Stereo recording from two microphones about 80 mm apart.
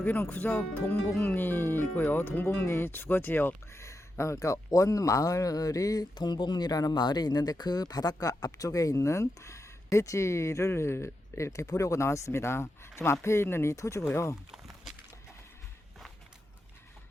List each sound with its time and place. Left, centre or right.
0.0 s speech: centre; by 14.0 s left